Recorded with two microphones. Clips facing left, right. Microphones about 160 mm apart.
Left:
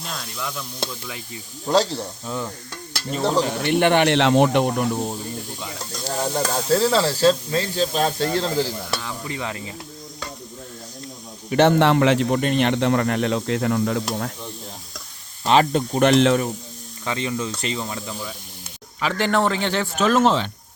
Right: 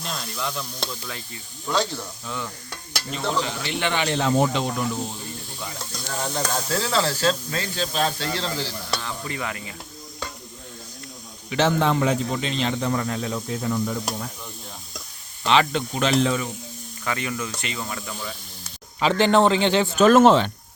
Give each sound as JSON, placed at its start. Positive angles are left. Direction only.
{"t": 0.0, "sound": "sizzle", "side_deg": 0}
{"t": 1.6, "sound": "speech", "side_deg": 35}
{"t": 6.1, "sound": "speech", "side_deg": 35}
{"t": 9.0, "sound": "speech", "side_deg": 15}
{"t": 11.4, "sound": "speech", "side_deg": 50}
{"t": 15.4, "sound": "speech", "side_deg": 40}
{"t": 16.0, "sound": "speech", "side_deg": 70}
{"t": 17.1, "sound": "speech", "side_deg": 25}
{"t": 18.1, "sound": "speech", "side_deg": 5}
{"t": 18.9, "sound": "a man's voice", "side_deg": -25}
{"t": 20.0, "sound": "speech", "side_deg": -50}